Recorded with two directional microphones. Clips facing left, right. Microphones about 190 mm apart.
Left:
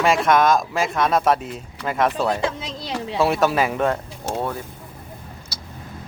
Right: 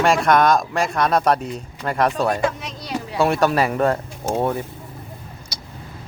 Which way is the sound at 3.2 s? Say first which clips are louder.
Right 1 dB; centre (ahead or behind).